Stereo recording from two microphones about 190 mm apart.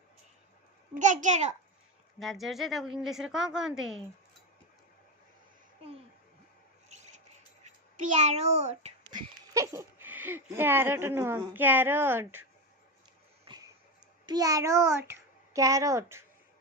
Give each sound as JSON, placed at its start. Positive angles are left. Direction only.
{"t": 0.9, "sound": "a child's voice", "side_deg": -40}
{"t": 2.1, "sound": "a woman's voice", "side_deg": 0}
{"t": 6.8, "sound": "rub", "side_deg": -35}
{"t": 7.6, "sound": "a child's voice", "side_deg": -40}
{"t": 9.1, "sound": "speech", "side_deg": -20}
{"t": 13.4, "sound": "a sound", "side_deg": -20}
{"t": 14.3, "sound": "a child's voice", "side_deg": -20}